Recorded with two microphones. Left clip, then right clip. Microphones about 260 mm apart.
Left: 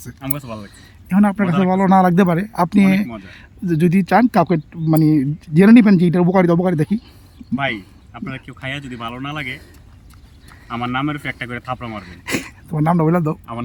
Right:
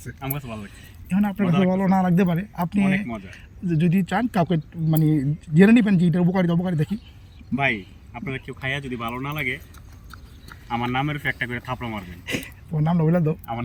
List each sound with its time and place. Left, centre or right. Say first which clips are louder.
0.2 s speech: left 4 dB; centre
7.5 s speech: left 1 dB; centre
10.7 s speech: left 3 dB; centre